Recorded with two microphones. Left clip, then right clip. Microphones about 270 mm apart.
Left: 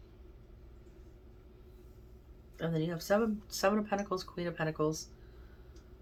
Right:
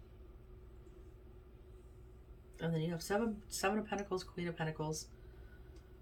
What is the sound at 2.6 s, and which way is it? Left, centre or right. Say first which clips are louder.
Speech: left 4 dB; centre.